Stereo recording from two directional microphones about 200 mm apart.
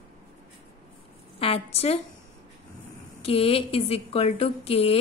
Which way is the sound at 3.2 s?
30° left (ahead or behind).